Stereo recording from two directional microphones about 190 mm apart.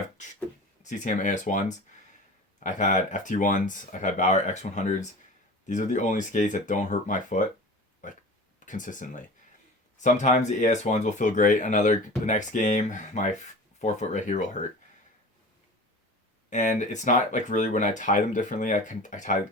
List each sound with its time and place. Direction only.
0.8 s speech: 40° left (ahead or behind)
16.5 s speech: 40° left (ahead or behind)